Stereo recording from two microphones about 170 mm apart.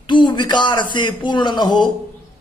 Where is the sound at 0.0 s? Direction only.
25° left (ahead or behind).